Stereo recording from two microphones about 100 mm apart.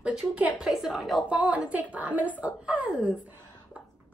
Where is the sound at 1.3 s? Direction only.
15° right (ahead or behind).